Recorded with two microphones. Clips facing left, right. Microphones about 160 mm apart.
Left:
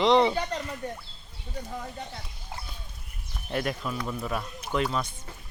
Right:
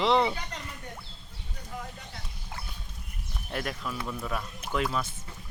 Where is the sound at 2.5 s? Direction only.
30° left (ahead or behind).